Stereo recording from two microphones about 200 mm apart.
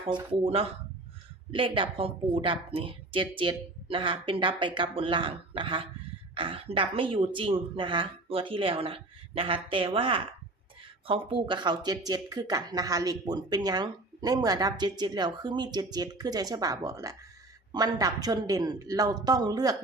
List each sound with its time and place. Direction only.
0.4 s speech: 30° right (ahead or behind)